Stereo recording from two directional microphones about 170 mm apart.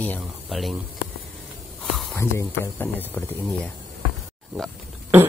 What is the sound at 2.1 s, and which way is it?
Speech, 15° left (ahead or behind).